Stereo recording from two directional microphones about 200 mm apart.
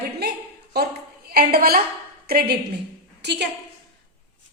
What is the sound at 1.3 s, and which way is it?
A woman's voice, 50° right (ahead or behind).